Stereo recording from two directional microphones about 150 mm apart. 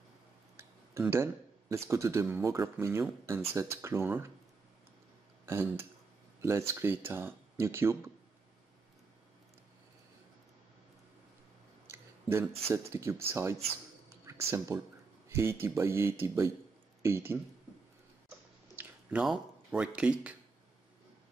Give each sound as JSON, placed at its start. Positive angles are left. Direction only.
{"t": 1.1, "sound": "speech", "side_deg": -20}
{"t": 5.4, "sound": "speech", "side_deg": -15}
{"t": 11.9, "sound": "a sound", "side_deg": -15}
{"t": 12.6, "sound": "speech", "side_deg": -15}
{"t": 18.8, "sound": "speech", "side_deg": -10}